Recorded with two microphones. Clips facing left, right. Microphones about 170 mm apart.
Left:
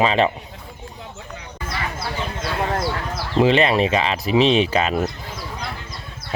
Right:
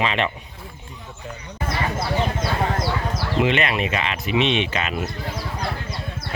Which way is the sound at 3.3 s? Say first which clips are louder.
Left 6 dB; 30° left (ahead or behind).